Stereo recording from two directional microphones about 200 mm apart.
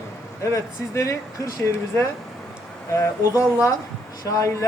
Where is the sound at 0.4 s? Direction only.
15° left (ahead or behind).